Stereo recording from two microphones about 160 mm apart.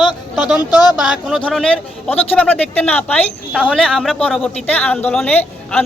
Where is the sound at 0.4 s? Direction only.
5° right (ahead or behind).